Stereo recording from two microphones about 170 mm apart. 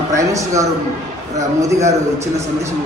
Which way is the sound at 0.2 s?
20° right (ahead or behind).